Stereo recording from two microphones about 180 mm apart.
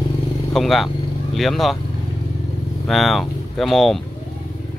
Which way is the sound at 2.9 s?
Centre (ahead or behind).